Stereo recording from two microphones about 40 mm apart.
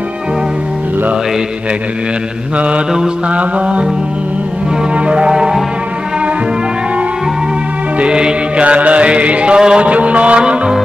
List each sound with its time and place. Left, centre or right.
2.5 s music: right
4.9 s music: right
5.3 s music: centre
8.0 s music: right
8.6 s music: right
9.6 s music: centre
9.8 s music: right